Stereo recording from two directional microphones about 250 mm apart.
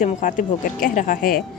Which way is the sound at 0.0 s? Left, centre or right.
Left.